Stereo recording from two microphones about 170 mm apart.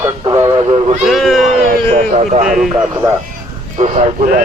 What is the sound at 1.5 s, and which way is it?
Speech, 45° right (ahead or behind).